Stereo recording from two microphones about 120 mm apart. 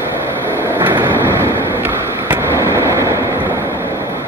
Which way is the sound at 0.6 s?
20° right (ahead or behind).